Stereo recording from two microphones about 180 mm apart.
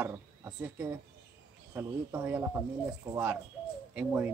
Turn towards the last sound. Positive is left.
turn(degrees=-10)  # may be behind; listen again after turning